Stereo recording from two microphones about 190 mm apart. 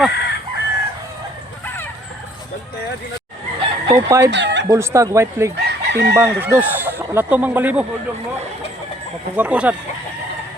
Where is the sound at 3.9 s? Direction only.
15° right (ahead or behind).